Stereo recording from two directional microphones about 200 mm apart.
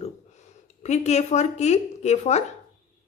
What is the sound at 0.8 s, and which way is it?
Speech, 35° left (ahead or behind).